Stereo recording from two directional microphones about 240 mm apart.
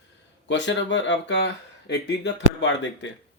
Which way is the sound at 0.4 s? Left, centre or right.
Left.